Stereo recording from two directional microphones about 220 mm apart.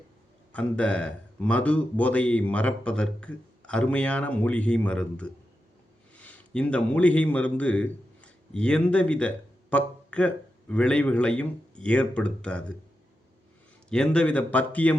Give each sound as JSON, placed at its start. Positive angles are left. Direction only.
{"t": 0.5, "sound": "a man's voice", "side_deg": 5}
{"t": 13.9, "sound": "speech", "side_deg": 5}